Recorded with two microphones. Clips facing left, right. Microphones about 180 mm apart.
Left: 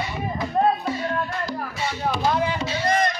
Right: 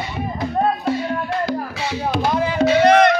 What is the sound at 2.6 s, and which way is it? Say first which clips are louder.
Music: right 10 dB; 70° right (ahead or behind).